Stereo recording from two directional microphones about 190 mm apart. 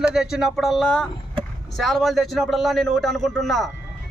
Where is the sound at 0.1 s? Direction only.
5° right (ahead or behind).